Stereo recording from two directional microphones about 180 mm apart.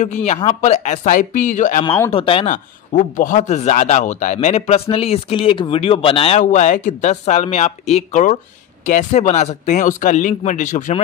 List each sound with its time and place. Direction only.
0.0 s speech: 40° left (ahead or behind)
2.0 s speech: 30° left (ahead or behind)
2.4 s speech: 45° left (ahead or behind); by 6.4 s 30° left (ahead or behind)
6.4 s speech: 45° left (ahead or behind)